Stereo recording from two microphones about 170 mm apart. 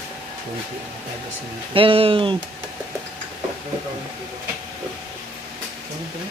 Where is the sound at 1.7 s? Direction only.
30° right (ahead or behind).